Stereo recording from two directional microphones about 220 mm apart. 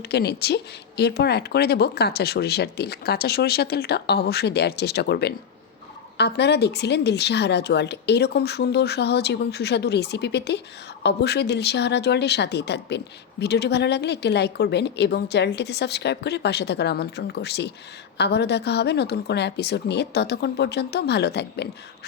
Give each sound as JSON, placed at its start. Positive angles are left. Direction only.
{"t": 0.1, "sound": "speech", "side_deg": 45}